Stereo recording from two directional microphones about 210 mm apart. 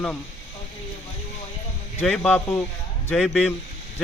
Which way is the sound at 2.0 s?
5° left (ahead or behind).